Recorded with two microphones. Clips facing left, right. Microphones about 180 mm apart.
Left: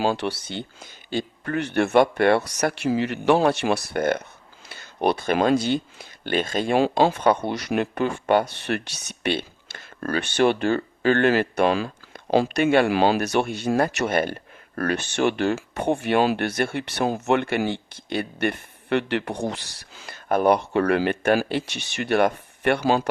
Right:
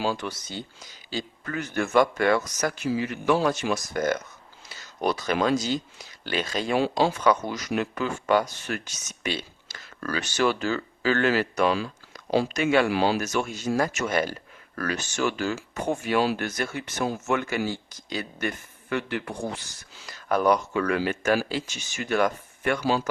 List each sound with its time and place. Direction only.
0.4 s speech: 60° left (ahead or behind)
20.1 s speech: 50° left (ahead or behind)